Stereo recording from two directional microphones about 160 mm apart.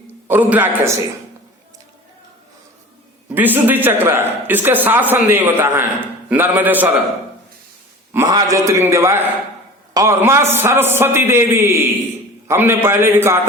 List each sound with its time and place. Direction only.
0.3 s a man's voice: 10° right (ahead or behind)
3.3 s a man's voice: 10° right (ahead or behind)
8.1 s a man's voice: 20° right (ahead or behind)